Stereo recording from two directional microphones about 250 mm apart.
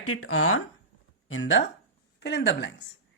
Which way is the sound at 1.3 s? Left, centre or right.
Left.